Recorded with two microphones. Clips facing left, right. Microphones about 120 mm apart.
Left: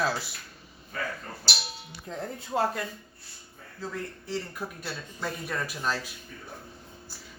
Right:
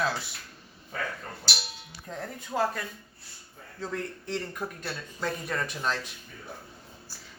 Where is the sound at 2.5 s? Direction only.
25° left (ahead or behind).